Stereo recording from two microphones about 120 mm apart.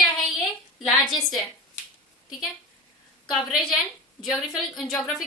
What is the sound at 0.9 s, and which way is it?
Speech, centre (ahead or behind).